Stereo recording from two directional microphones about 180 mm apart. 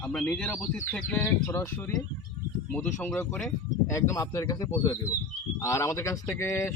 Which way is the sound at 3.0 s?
10° left (ahead or behind).